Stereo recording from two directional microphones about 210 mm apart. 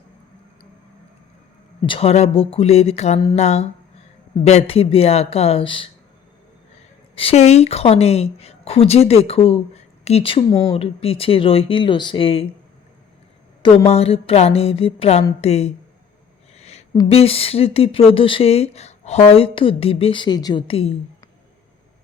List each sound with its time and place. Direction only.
1.9 s a woman's voice: 30° left (ahead or behind)
7.2 s a woman's voice: 30° left (ahead or behind)
13.6 s a woman's voice: 25° left (ahead or behind)
16.6 s a sound: 30° left (ahead or behind)
16.9 s a woman's voice: 25° left (ahead or behind)